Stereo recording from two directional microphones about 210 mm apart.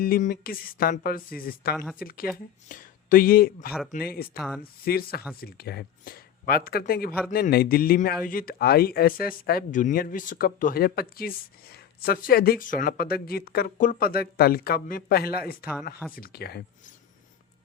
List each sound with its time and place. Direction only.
0.0 s a man's voice: 40° left (ahead or behind)
4.4 s speech: centre (ahead or behind)
4.9 s a man's voice: 45° left (ahead or behind)